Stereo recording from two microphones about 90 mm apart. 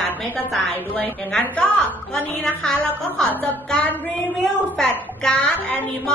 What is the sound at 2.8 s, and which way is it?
A woman's voice, 20° left (ahead or behind).